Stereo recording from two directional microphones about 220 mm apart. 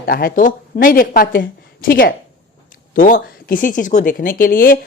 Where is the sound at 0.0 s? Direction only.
45° left (ahead or behind).